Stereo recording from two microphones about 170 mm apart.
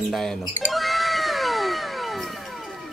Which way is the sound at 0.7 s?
Centre (ahead or behind).